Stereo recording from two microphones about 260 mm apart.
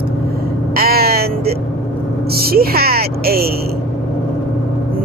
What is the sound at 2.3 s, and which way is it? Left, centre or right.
Speech, right.